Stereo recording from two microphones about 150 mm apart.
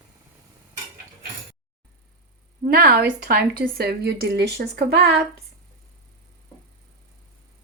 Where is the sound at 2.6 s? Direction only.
75° right (ahead or behind); by 5.1 s 90° right.